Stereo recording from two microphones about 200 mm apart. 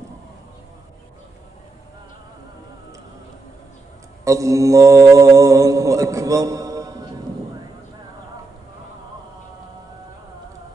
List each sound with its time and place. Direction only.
4.2 s mantra: 15° right (ahead or behind)